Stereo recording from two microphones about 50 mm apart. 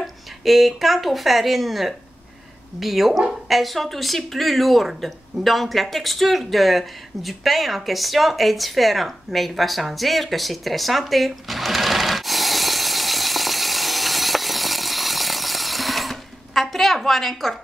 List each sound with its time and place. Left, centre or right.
0.0 s speech: centre